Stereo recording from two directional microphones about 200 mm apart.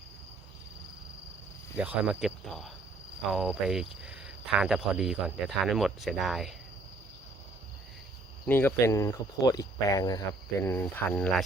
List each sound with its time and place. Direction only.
1.7 s speech: 5° right (ahead or behind)
8.4 s speech: 10° left (ahead or behind)